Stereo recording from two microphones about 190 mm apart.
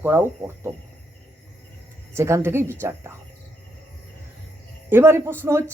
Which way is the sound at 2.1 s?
15° right (ahead or behind).